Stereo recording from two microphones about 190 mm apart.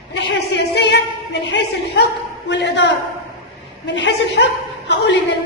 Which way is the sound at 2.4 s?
65° left (ahead or behind).